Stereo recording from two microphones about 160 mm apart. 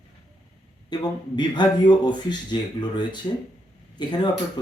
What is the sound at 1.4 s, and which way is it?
Speech, 30° left (ahead or behind).